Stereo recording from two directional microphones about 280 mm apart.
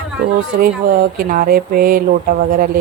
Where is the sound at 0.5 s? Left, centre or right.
Right.